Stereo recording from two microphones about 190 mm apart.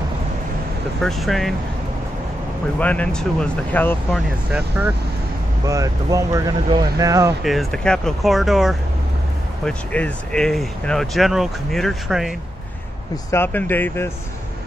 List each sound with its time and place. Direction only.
1.0 s speech: centre (ahead or behind)
2.8 s speech: 5° left (ahead or behind)
4.5 s speech: 5° right (ahead or behind)
5.7 s speech: 15° right (ahead or behind)
7.4 s speech: centre (ahead or behind)
13.1 s speech: 15° left (ahead or behind)